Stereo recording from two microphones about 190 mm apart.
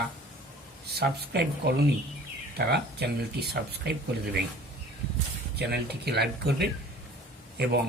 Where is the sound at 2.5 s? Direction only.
60° right (ahead or behind).